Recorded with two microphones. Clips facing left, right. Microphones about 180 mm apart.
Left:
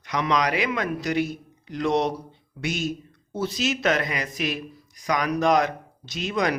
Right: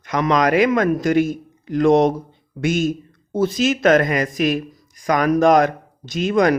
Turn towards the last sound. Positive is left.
turn(degrees=-45)  # may be behind; listen again after turning